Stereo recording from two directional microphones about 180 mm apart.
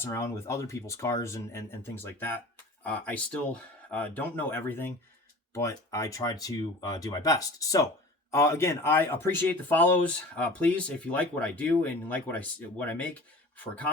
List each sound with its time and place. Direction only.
0.0 s speech: 15° left (ahead or behind)